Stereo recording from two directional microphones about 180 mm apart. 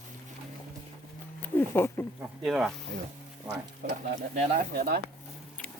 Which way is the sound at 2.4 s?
Centre (ahead or behind).